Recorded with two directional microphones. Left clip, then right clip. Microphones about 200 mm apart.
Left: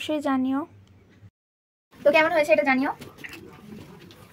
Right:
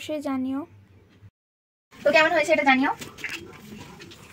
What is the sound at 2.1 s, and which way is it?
Speech, 30° left (ahead or behind).